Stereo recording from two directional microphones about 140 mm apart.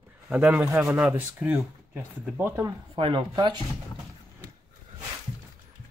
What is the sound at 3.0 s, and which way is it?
Speech, 35° right (ahead or behind).